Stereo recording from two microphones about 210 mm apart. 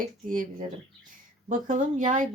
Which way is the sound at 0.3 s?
40° right (ahead or behind).